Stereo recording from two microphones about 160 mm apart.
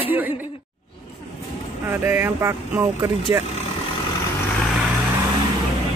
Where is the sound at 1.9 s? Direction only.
15° right (ahead or behind).